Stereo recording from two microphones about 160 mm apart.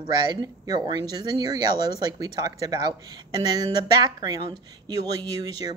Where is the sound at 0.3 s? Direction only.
25° right (ahead or behind).